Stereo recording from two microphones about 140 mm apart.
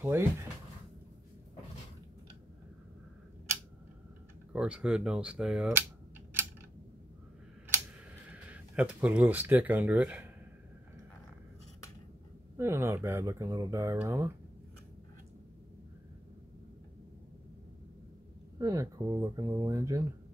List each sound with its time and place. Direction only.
0.0 s speech: 15° right (ahead or behind)
4.5 s speech: 10° right (ahead or behind)
8.5 s speech: 10° right (ahead or behind)
12.5 s speech: 20° right (ahead or behind)
18.6 s speech: 25° right (ahead or behind)